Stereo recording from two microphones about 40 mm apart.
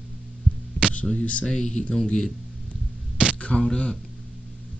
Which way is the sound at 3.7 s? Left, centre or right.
Centre.